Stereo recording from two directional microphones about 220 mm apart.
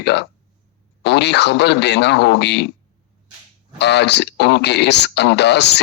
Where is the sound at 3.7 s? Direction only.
50° left (ahead or behind).